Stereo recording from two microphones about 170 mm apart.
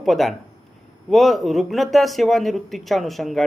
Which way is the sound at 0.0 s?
Centre (ahead or behind).